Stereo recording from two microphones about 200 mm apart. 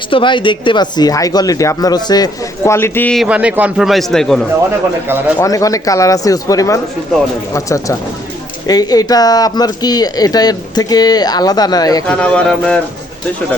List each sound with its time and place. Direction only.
0.1 s speech: 25° left (ahead or behind); by 3.2 s 5° left (ahead or behind)
3.2 s a man's voice: 5° right (ahead or behind)
5.4 s speech: 15° left (ahead or behind)
12.0 s a man's voice: 5° left (ahead or behind)